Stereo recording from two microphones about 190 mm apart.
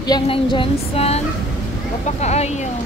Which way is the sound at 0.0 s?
25° left (ahead or behind).